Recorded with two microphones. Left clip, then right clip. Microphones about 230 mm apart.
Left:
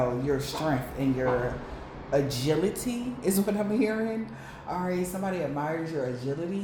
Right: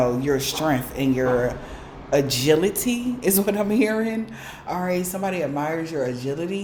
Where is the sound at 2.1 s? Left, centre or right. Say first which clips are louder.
Right 8 dB; right.